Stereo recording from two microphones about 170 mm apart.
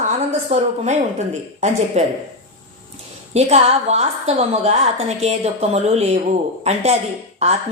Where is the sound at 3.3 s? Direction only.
40° right (ahead or behind).